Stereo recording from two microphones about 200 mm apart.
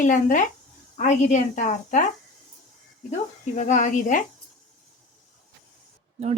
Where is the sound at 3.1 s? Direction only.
35° left (ahead or behind).